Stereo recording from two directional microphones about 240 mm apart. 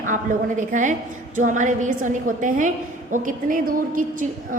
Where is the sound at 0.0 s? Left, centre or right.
Right.